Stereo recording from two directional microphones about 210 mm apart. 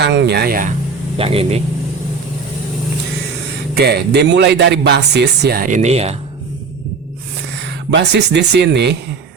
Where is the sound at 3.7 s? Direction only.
50° right (ahead or behind); by 6.2 s 30° right (ahead or behind).